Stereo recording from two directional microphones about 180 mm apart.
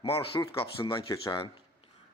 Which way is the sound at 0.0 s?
30° left (ahead or behind).